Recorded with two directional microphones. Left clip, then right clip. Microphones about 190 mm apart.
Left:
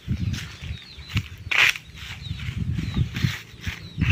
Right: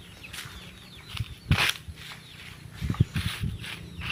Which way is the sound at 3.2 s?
15° left (ahead or behind).